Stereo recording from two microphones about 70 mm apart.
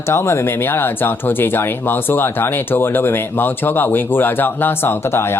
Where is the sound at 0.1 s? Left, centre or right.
Left.